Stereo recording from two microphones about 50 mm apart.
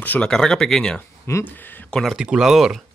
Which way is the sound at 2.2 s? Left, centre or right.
Centre.